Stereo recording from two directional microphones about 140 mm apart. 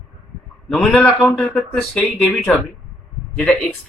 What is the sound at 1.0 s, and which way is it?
Speech, 10° left (ahead or behind).